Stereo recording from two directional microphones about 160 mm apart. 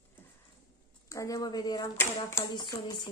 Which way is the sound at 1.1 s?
20° left (ahead or behind).